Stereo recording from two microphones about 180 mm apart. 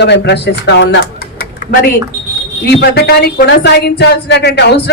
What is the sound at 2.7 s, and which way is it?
Speech, 65° left (ahead or behind).